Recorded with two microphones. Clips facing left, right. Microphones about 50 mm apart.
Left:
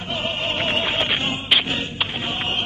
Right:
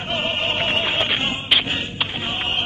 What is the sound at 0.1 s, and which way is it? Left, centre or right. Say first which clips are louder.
Music: right 2 dB; right.